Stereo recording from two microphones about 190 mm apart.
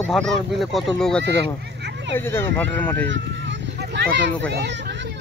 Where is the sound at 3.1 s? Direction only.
70° right (ahead or behind).